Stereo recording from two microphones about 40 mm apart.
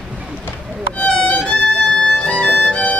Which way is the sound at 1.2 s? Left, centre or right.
Left.